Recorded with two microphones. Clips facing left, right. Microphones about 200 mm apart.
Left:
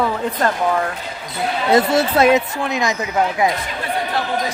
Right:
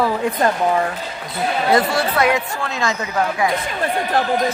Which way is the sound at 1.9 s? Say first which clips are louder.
Left 4 dB; 25° left (ahead or behind).